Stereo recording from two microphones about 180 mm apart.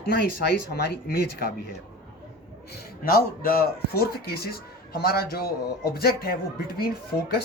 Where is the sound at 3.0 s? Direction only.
55° left (ahead or behind).